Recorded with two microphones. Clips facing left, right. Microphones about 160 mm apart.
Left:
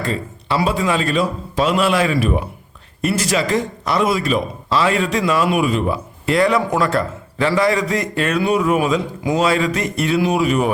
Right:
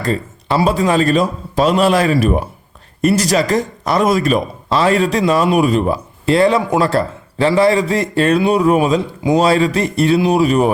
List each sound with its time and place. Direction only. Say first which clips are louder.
0.0 s speech: right 4 dB; 40° right (ahead or behind)